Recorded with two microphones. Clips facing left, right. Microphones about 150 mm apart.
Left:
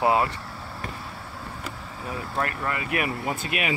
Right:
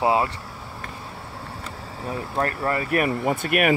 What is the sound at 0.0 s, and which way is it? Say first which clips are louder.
Speech: right 1 dB; 20° right (ahead or behind).